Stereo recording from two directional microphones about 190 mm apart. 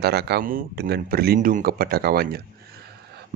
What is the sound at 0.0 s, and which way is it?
Speech, 60° right (ahead or behind).